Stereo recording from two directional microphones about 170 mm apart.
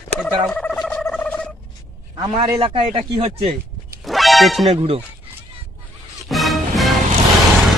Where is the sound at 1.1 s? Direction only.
5° left (ahead or behind).